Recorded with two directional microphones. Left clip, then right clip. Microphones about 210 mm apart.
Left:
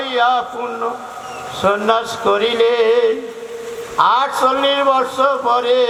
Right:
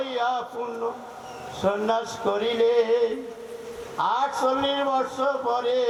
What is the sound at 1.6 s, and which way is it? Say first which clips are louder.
A man's voice: left 9 dB; 20° left (ahead or behind).